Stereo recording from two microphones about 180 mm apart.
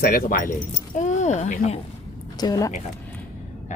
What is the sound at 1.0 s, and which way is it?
Speech, 40° left (ahead or behind).